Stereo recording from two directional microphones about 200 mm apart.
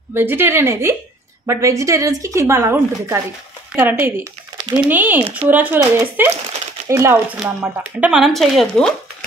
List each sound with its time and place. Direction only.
0.1 s a woman's voice: 10° right (ahead or behind)